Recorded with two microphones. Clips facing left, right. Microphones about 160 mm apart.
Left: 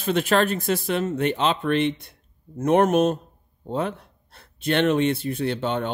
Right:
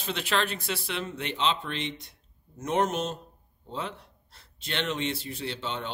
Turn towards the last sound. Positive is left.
turn(degrees=55)  # may be behind; listen again after turning